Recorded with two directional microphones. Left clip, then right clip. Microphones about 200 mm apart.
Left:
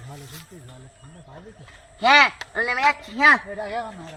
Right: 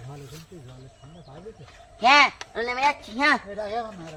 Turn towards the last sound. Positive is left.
turn(degrees=-15)  # may be behind; listen again after turning